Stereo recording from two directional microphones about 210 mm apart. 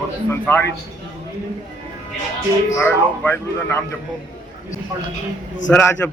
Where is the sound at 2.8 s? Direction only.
10° left (ahead or behind).